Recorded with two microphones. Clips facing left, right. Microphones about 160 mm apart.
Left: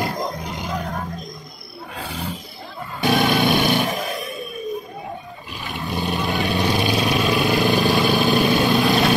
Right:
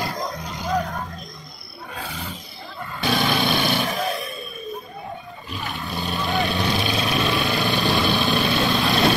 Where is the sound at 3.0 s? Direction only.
50° left (ahead or behind).